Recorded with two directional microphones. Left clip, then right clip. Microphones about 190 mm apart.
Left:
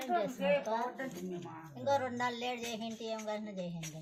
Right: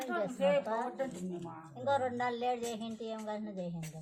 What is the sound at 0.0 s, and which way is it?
Speech, 55° right (ahead or behind).